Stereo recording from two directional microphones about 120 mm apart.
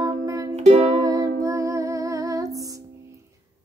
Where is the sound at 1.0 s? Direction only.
30° right (ahead or behind).